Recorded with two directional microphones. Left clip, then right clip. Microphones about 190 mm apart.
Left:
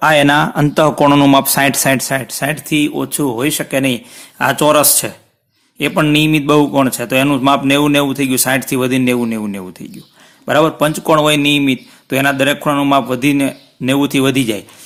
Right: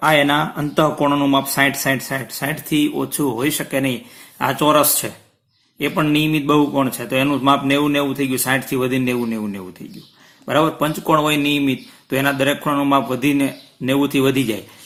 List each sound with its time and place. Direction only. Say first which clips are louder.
0.0 s speech: left 5 dB; 50° left (ahead or behind)